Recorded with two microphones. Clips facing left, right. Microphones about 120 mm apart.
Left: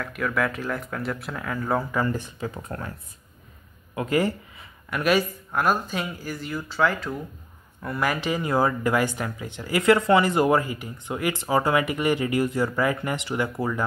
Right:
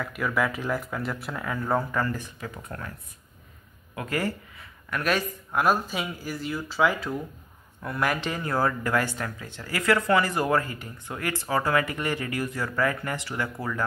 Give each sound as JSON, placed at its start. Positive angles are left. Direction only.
{"t": 0.0, "sound": "speech", "side_deg": 0}
{"t": 2.0, "sound": "speech", "side_deg": 25}
{"t": 3.9, "sound": "a sound", "side_deg": 20}
{"t": 5.5, "sound": "speech", "side_deg": 0}